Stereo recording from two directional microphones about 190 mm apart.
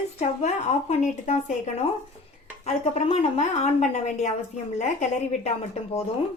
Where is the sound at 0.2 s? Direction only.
35° left (ahead or behind).